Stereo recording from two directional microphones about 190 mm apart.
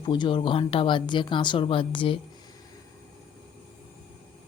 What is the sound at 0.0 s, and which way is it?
Speech, 25° left (ahead or behind).